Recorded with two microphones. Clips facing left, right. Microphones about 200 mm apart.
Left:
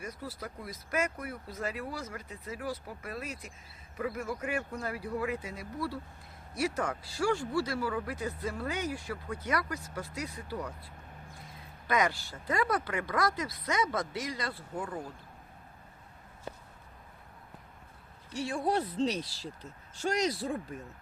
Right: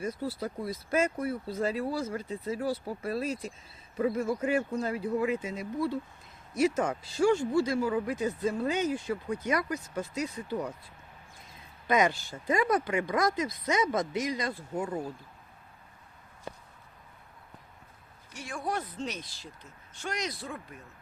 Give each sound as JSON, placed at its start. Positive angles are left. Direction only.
{"t": 0.0, "sound": "speech", "side_deg": -30}
{"t": 11.9, "sound": "speech", "side_deg": -20}
{"t": 18.3, "sound": "speech", "side_deg": 30}